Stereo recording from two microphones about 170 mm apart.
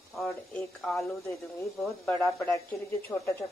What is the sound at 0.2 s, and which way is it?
Speech, centre (ahead or behind).